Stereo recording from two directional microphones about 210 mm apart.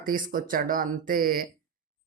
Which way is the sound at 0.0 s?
40° right (ahead or behind).